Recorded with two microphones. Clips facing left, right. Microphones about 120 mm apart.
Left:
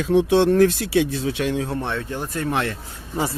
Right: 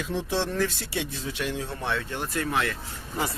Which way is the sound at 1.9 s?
30° left (ahead or behind).